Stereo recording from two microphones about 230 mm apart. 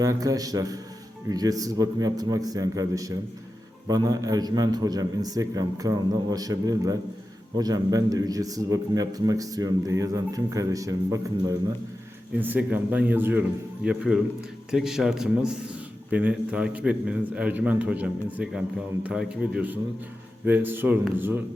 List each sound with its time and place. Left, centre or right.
0.0 s a man's voice: centre